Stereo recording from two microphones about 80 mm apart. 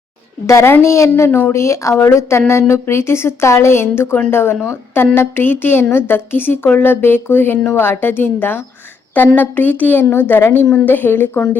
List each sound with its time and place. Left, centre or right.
0.4 s a woman's voice: left